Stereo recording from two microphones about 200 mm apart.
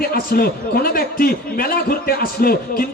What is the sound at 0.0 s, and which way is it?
A man's voice, 50° left (ahead or behind).